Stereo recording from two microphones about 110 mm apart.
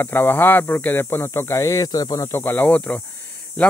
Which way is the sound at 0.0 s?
20° left (ahead or behind).